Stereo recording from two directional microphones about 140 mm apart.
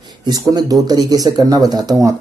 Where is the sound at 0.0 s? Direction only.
30° right (ahead or behind).